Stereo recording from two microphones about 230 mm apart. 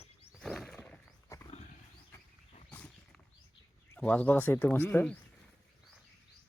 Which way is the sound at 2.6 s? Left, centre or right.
Centre.